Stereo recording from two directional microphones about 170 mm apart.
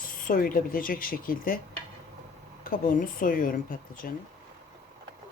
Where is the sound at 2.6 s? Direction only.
55° left (ahead or behind).